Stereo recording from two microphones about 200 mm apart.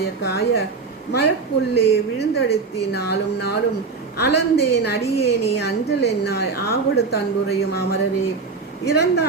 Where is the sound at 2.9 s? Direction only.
55° left (ahead or behind).